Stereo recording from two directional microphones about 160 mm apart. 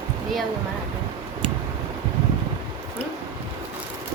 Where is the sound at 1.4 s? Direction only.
35° right (ahead or behind).